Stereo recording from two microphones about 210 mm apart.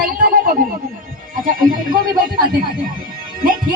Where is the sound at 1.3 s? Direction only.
40° right (ahead or behind).